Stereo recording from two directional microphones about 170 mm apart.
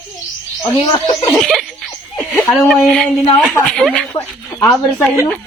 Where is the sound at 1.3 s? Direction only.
Centre (ahead or behind).